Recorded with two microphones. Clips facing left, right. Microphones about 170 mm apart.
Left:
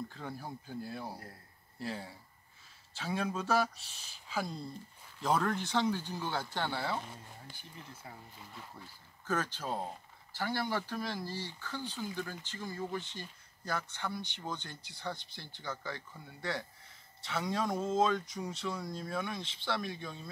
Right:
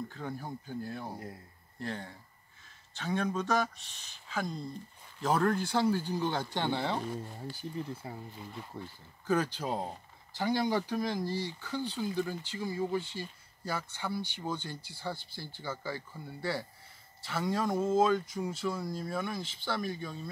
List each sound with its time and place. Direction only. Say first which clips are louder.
0.1 s speech: right 3 dB; centre (ahead or behind); by 7.0 s 20° right (ahead or behind)
8.0 s speech: right 7 dB; 25° right (ahead or behind)
9.2 s speech: right 5 dB; 10° right (ahead or behind)